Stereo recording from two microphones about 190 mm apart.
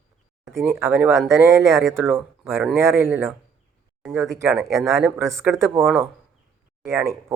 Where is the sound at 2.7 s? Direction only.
15° right (ahead or behind).